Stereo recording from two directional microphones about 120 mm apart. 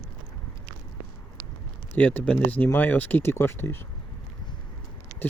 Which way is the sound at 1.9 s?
10° left (ahead or behind).